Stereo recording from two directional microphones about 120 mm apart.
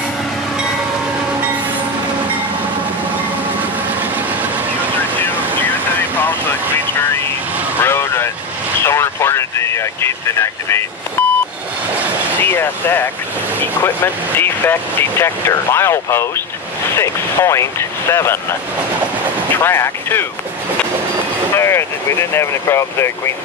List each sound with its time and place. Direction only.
7.8 s vehicle: 20° left (ahead or behind)
11.2 s beep: 15° left (ahead or behind)
12.4 s vehicle: 15° left (ahead or behind)
14.4 s speech: 15° left (ahead or behind)
19.5 s speech: 20° left (ahead or behind)
21.5 s speech: 20° left (ahead or behind)